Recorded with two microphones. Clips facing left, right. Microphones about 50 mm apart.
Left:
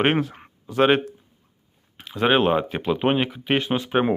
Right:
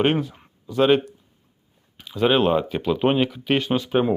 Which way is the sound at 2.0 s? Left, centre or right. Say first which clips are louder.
Right 1 dB; left.